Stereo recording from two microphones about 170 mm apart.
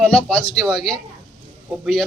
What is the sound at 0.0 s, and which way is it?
Speech, 5° left (ahead or behind).